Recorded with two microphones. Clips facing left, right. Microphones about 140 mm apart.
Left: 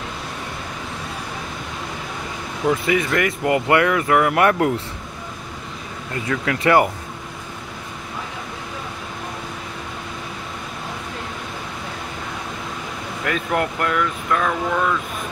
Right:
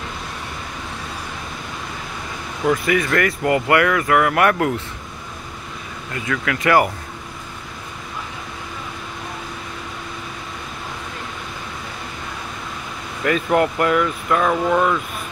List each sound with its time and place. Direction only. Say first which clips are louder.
2.7 s speech: right 1 dB; 25° left (ahead or behind)
6.2 s speech: left 1 dB; 25° left (ahead or behind)
13.2 s speech: right 5 dB; centre (ahead or behind)